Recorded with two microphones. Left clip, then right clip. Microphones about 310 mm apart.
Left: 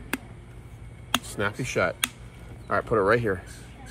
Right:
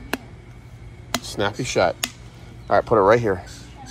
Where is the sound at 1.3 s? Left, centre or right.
Centre.